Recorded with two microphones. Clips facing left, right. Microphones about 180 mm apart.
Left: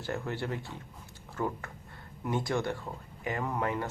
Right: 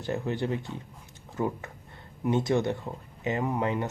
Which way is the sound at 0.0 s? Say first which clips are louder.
Right 5 dB; 20° right (ahead or behind).